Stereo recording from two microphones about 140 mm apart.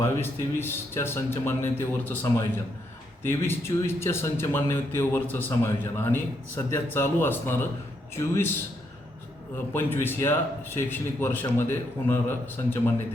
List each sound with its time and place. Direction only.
0.0 s a man's voice: 15° left (ahead or behind)
9.7 s speech: 15° left (ahead or behind)